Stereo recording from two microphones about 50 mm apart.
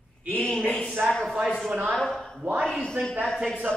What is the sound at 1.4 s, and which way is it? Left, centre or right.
Speech, centre.